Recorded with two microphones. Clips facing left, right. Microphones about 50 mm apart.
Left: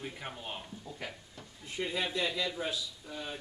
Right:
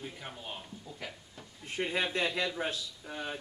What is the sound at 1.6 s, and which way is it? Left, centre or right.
Speech, right.